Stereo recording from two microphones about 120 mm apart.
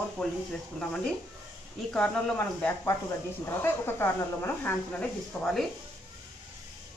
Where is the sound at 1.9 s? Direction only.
5° left (ahead or behind).